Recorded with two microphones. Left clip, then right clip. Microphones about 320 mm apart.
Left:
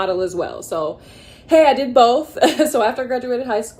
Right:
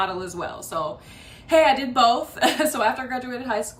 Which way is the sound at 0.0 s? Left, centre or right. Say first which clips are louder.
Left 6 dB; centre.